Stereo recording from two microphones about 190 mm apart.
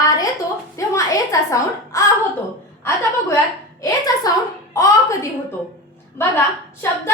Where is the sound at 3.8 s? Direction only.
20° left (ahead or behind).